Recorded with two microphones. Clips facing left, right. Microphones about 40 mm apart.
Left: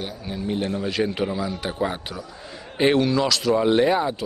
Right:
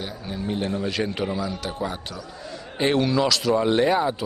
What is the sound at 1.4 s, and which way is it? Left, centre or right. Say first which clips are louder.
Speech: left 3 dB; left.